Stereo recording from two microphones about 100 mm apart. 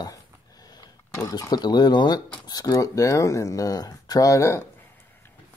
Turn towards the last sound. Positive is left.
turn(degrees=30)  # may be behind; listen again after turning